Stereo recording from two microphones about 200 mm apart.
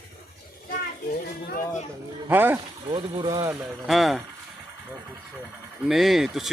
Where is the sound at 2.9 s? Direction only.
20° right (ahead or behind).